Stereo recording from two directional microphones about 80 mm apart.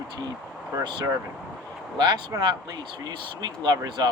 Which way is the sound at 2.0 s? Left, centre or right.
Right.